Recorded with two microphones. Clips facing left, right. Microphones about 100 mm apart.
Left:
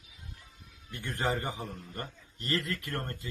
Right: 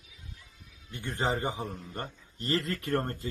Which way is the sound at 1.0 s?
25° right (ahead or behind).